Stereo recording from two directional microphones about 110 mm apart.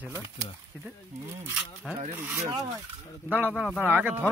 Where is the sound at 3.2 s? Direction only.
15° right (ahead or behind).